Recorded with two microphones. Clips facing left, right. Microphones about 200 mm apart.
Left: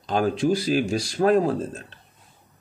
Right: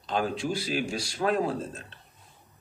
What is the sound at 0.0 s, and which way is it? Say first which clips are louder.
Speech: left 7 dB; 45° left (ahead or behind).